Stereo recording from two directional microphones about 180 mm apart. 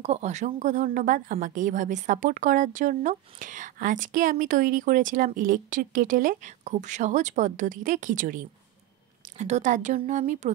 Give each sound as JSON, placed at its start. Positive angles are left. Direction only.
{"t": 0.0, "sound": "a woman's voice", "side_deg": -40}